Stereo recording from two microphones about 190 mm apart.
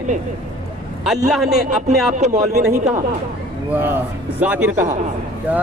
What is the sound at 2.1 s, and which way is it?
Speech, 35° right (ahead or behind).